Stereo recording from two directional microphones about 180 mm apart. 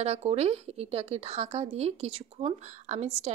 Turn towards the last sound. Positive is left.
turn(degrees=-35)  # may be behind; listen again after turning